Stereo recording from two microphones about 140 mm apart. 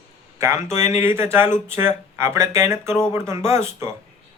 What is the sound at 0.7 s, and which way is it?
Speech, 55° left (ahead or behind).